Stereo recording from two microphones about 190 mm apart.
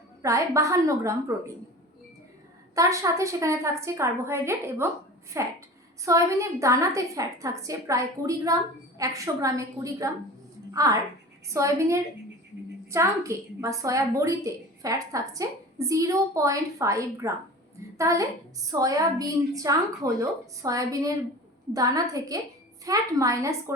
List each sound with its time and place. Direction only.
0.2 s a woman's voice: 15° right (ahead or behind)
2.7 s a woman's voice: 15° right (ahead or behind)